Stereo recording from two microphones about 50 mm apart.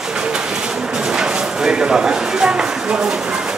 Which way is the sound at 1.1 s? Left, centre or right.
Centre.